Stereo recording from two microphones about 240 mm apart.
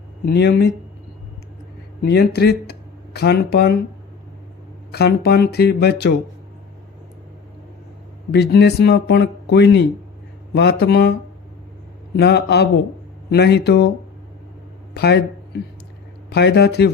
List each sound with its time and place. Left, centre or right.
0.3 s speech: left
2.0 s speech: left
4.9 s speech: left
8.3 s speech: left
12.1 s speech: left
14.9 s speech: left